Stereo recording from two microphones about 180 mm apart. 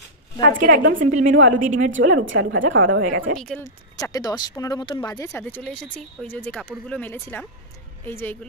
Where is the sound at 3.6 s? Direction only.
20° left (ahead or behind).